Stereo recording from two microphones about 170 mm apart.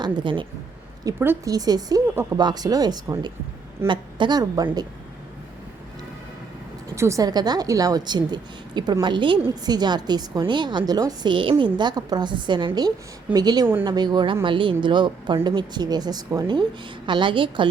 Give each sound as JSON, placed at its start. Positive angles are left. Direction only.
{"t": 0.0, "sound": "a woman's voice", "side_deg": -30}
{"t": 1.0, "sound": "a woman's voice", "side_deg": -15}
{"t": 6.9, "sound": "a woman's voice", "side_deg": -15}